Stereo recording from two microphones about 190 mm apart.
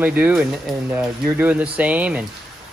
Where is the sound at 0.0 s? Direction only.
10° right (ahead or behind).